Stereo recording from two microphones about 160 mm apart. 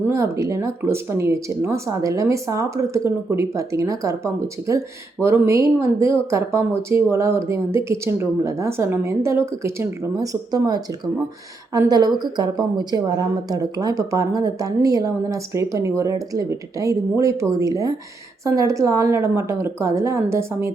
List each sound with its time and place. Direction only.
0.1 s speech: 20° right (ahead or behind)